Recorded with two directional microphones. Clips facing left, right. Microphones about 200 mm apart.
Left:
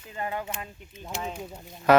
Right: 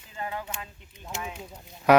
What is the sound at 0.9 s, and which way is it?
Speech, 25° left (ahead or behind).